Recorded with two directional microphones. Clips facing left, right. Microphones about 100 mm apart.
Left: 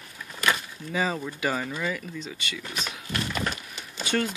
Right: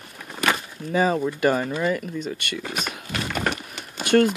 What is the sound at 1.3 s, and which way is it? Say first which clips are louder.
Speech: right 7 dB; 50° right (ahead or behind).